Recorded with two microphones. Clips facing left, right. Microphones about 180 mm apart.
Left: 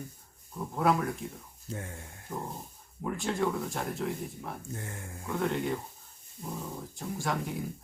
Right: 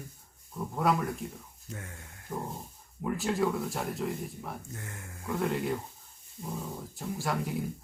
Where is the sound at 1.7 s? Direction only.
30° left (ahead or behind).